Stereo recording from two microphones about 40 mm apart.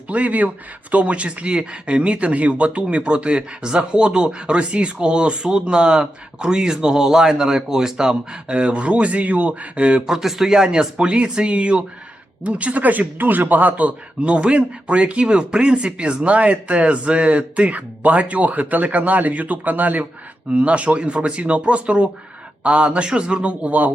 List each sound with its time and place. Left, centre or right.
0.1 s speech: right
10.1 s a man's voice: centre; by 13.9 s right
14.2 s speech: right
20.5 s speech: right